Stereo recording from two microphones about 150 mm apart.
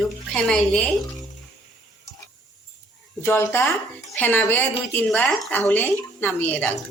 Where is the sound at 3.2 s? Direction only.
15° left (ahead or behind).